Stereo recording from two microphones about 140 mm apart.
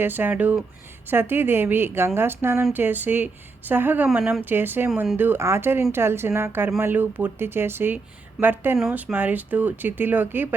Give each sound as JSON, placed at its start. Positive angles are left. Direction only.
{"t": 0.0, "sound": "speech", "side_deg": -15}